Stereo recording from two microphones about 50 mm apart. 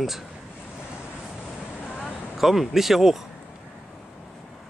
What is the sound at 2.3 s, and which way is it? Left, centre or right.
Speech, centre.